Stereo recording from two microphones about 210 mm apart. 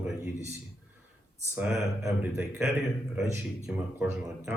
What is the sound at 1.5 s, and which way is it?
Speech, 10° right (ahead or behind).